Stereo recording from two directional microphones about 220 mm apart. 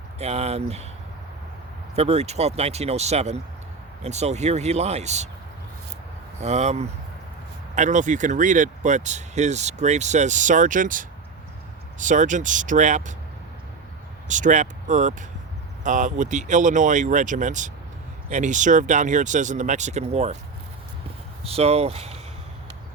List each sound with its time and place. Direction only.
0.2 s speech: 30° right (ahead or behind)
2.0 s speech: 30° right (ahead or behind)
6.4 s speech: 30° right (ahead or behind)
14.3 s speech: 35° right (ahead or behind)
21.4 s speech: 30° right (ahead or behind)